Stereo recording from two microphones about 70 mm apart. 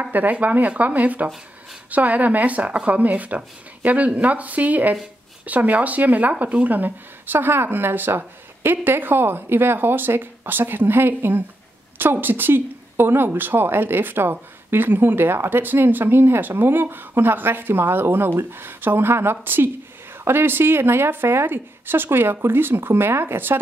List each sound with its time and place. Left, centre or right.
0.0 s speech: right